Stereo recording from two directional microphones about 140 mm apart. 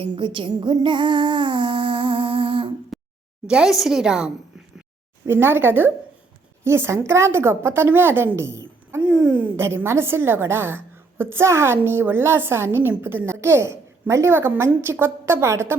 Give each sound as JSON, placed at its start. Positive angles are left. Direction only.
{"t": 0.2, "sound": "a sound", "side_deg": -35}
{"t": 3.4, "sound": "a woman's voice", "side_deg": -5}
{"t": 5.2, "sound": "a woman's voice", "side_deg": -15}
{"t": 9.0, "sound": "a woman's voice", "side_deg": -5}